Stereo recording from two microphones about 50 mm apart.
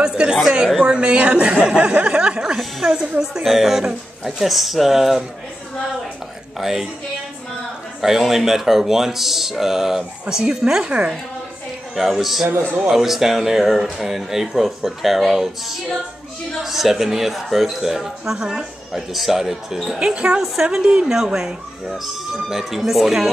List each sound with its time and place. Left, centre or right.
0.0 s a sound: centre
0.7 s a woman's voice: centre
1.6 s a sound: centre
2.4 s a woman's voice: centre
6.6 s speech: centre
8.0 s speech: centre
10.2 s a woman's voice: centre
11.9 s speech: centre
18.9 s speech: centre
20.0 s speech: centre